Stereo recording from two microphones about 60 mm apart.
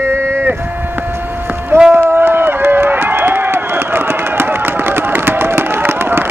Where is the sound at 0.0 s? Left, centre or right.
Right.